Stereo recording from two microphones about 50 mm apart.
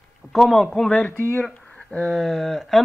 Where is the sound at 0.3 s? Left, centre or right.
Centre.